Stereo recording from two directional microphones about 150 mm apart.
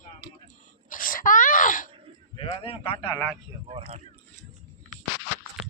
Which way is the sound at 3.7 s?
40° right (ahead or behind).